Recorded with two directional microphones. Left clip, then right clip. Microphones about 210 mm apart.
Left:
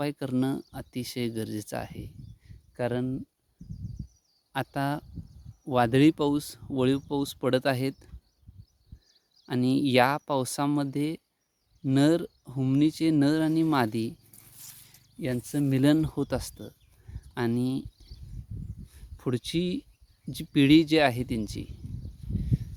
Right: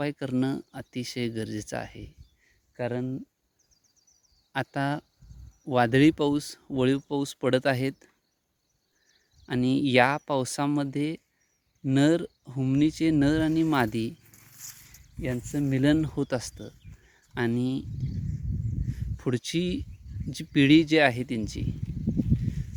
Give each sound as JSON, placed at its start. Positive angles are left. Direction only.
{"t": 0.0, "sound": "speech", "side_deg": 5}
{"t": 2.7, "sound": "speech", "side_deg": 15}
{"t": 4.5, "sound": "speech", "side_deg": 0}
{"t": 9.5, "sound": "speech", "side_deg": 0}
{"t": 14.7, "sound": "zipper", "side_deg": 5}
{"t": 15.2, "sound": "speech", "side_deg": 15}
{"t": 19.1, "sound": "speech", "side_deg": 0}